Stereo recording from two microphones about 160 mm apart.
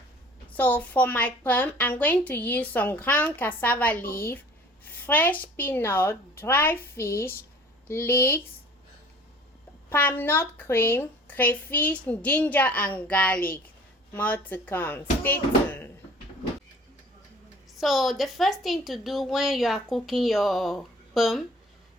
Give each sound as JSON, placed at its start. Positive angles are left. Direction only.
{"t": 0.5, "sound": "a woman's voice", "side_deg": 10}
{"t": 5.0, "sound": "a woman's voice", "side_deg": 10}
{"t": 9.9, "sound": "a woman's voice", "side_deg": 15}
{"t": 17.7, "sound": "a woman's voice", "side_deg": 0}